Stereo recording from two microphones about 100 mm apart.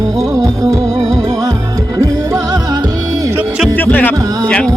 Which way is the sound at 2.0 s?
35° right (ahead or behind).